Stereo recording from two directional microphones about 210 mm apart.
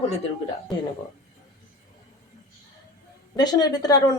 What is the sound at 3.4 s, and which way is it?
Speech, 20° left (ahead or behind).